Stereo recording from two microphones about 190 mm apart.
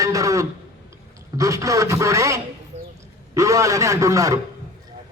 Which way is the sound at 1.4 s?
15° right (ahead or behind).